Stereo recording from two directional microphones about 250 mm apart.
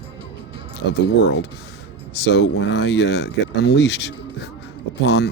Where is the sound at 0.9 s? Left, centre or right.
Left.